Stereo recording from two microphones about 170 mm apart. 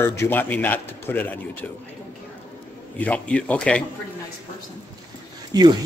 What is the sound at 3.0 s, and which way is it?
Speech, 5° left (ahead or behind).